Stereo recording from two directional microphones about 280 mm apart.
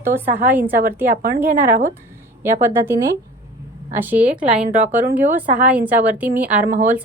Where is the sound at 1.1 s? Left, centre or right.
Right.